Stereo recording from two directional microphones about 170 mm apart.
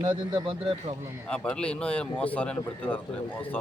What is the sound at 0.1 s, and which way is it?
Speech, 30° right (ahead or behind).